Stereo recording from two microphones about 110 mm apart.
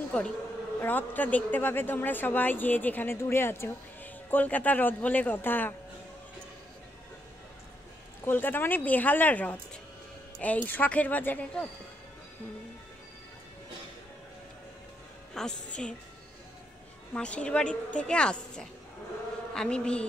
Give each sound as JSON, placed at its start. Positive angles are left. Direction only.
{"t": 0.7, "sound": "speech", "side_deg": 15}
{"t": 8.3, "sound": "speech", "side_deg": 15}
{"t": 15.3, "sound": "speech", "side_deg": 5}
{"t": 17.1, "sound": "speech", "side_deg": 10}